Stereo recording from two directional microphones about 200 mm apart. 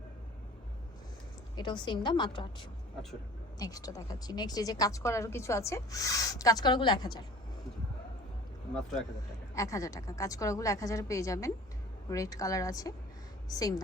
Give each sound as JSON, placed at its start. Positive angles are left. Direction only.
{"t": 1.5, "sound": "a woman's voice", "side_deg": 20}
{"t": 9.6, "sound": "a woman's voice", "side_deg": 15}